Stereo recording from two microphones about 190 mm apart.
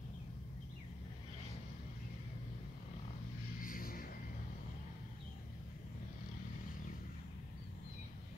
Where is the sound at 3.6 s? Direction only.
50° left (ahead or behind).